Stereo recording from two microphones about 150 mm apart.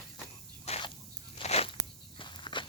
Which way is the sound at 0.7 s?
40° left (ahead or behind).